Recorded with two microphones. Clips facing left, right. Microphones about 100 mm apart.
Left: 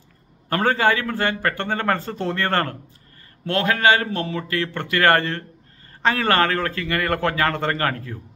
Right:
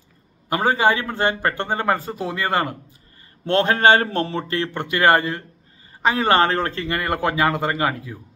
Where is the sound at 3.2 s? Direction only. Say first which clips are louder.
Right 3 dB; 25° right (ahead or behind); by 8.2 s 10° right (ahead or behind).